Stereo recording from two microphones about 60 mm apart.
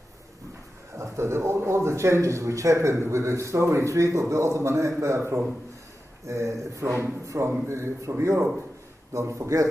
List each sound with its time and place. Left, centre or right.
0.9 s a man's voice: right